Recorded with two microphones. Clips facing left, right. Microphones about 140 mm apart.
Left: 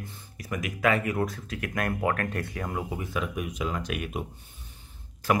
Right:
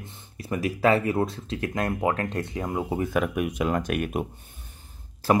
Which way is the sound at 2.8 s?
50° right (ahead or behind).